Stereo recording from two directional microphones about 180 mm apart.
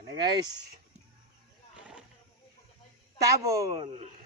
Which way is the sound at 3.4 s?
20° right (ahead or behind).